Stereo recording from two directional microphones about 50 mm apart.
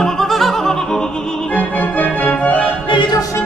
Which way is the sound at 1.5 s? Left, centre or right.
Left.